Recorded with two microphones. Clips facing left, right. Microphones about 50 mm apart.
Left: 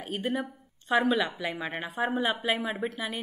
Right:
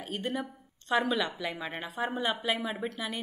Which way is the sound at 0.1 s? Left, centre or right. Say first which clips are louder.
Left 3 dB; centre.